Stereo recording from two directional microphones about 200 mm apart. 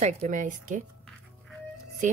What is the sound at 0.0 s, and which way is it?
Speech, 35° right (ahead or behind).